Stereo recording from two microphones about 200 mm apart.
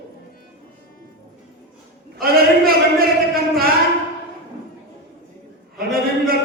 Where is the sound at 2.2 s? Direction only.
50° right (ahead or behind).